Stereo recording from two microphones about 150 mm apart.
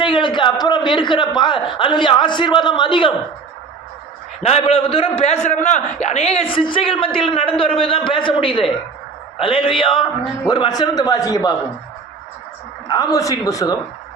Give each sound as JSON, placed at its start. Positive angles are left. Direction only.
{"t": 0.0, "sound": "a man's voice", "side_deg": 30}
{"t": 4.4, "sound": "a man's voice", "side_deg": 45}
{"t": 12.9, "sound": "a man's voice", "side_deg": 25}